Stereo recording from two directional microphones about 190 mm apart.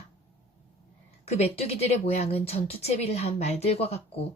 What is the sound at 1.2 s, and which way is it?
A woman's voice, 35° left (ahead or behind).